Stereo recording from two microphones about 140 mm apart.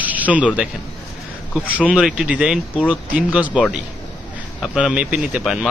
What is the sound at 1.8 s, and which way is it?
Speech, 5° right (ahead or behind).